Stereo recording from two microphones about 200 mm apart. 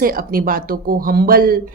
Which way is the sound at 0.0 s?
45° right (ahead or behind).